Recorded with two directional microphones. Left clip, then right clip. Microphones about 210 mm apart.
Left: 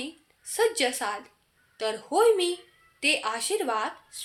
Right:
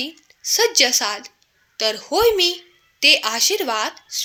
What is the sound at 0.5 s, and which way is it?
A woman's voice, 40° right (ahead or behind).